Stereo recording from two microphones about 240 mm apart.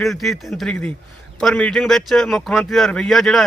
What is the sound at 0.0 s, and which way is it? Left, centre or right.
Speech, centre.